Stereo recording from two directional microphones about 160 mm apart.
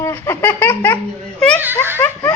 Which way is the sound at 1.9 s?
15° left (ahead or behind).